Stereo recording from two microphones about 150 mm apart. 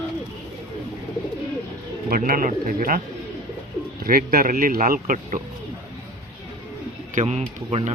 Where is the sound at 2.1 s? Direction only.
75° right (ahead or behind).